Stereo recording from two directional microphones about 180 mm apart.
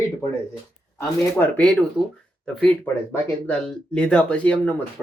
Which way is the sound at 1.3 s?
5° left (ahead or behind).